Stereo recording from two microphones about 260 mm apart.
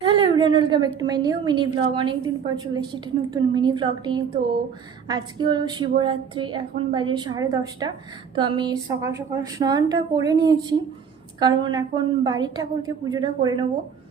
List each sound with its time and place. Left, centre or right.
0.0 s a woman's voice: centre